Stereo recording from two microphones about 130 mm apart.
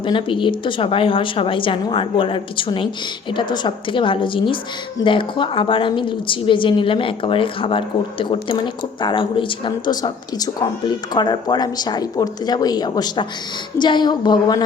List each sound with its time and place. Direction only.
0.0 s a woman's voice: 40° left (ahead or behind)